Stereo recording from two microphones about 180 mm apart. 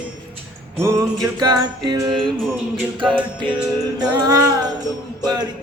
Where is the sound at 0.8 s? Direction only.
15° right (ahead or behind).